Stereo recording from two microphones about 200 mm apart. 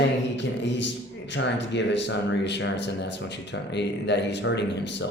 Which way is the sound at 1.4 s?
60° left (ahead or behind).